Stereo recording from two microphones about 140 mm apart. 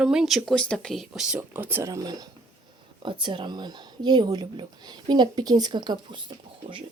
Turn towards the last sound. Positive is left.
turn(degrees=-35)  # may be behind; listen again after turning